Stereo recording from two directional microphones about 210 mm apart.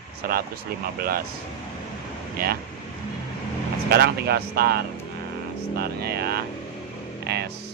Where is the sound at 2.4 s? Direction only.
45° right (ahead or behind).